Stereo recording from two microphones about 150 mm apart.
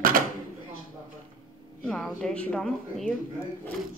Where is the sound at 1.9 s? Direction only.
5° left (ahead or behind).